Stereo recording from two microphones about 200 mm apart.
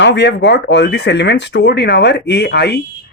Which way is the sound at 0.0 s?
60° left (ahead or behind).